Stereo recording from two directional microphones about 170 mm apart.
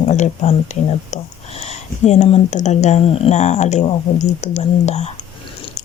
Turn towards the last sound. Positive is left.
turn(degrees=40)  # may be behind; listen again after turning